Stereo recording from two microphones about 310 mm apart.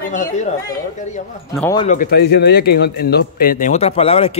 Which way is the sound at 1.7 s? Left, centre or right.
Left.